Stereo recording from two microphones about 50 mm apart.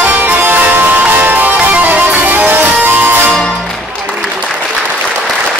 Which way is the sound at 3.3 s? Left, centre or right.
Centre.